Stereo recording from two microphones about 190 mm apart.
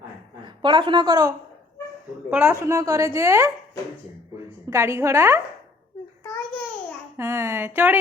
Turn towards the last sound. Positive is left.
turn(degrees=-10)  # may be behind; listen again after turning